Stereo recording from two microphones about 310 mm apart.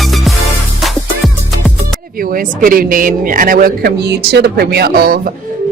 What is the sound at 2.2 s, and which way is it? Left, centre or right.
Speech, right.